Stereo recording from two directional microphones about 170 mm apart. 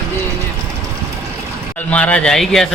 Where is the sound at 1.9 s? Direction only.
5° left (ahead or behind).